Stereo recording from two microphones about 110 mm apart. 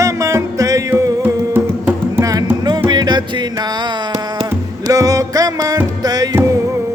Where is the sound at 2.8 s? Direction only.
40° right (ahead or behind).